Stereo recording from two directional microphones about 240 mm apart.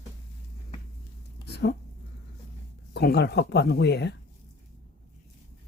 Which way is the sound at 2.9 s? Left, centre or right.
Left.